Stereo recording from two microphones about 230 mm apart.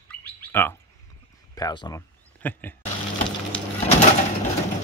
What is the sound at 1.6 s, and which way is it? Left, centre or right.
Speech, centre.